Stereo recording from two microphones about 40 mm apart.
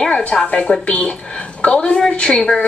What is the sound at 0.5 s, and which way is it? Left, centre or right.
A woman's voice, left.